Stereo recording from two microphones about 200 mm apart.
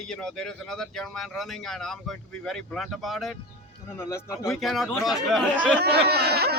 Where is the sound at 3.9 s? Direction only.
15° left (ahead or behind).